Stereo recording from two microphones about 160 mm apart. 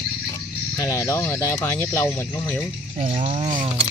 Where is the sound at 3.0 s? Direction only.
35° right (ahead or behind).